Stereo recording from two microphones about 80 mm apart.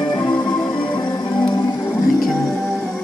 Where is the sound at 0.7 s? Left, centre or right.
Left.